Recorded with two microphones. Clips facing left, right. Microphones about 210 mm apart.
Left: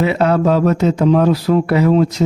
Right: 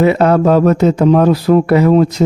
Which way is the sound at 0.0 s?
50° right (ahead or behind).